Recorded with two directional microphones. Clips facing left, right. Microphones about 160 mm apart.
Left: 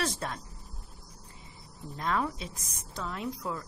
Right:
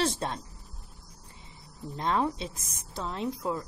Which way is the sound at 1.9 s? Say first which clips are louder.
Right 3 dB; 25° right (ahead or behind).